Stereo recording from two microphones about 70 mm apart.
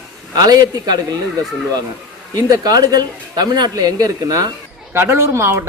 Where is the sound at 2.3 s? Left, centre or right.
Right.